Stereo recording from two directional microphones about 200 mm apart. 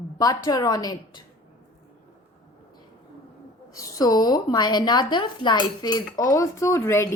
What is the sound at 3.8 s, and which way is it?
A woman's voice, 20° left (ahead or behind).